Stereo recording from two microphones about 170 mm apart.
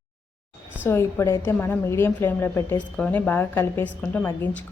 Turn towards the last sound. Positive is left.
turn(degrees=10)  # may be behind; listen again after turning